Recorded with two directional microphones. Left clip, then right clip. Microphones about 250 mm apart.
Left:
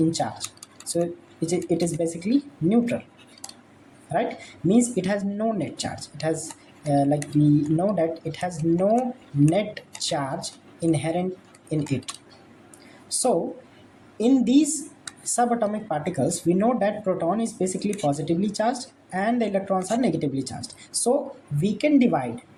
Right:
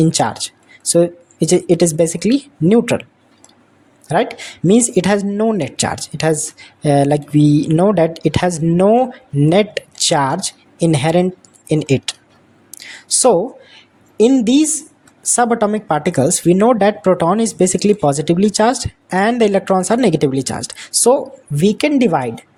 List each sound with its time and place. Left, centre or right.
0.0 s speech: right
4.1 s speech: right
12.8 s a sound: right
14.2 s speech: right